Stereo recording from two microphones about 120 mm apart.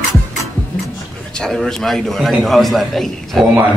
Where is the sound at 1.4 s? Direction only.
5° left (ahead or behind).